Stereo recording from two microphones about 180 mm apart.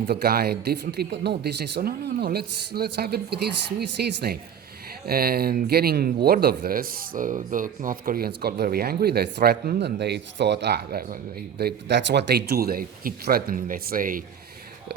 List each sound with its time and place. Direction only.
0.1 s speech: 60° right (ahead or behind)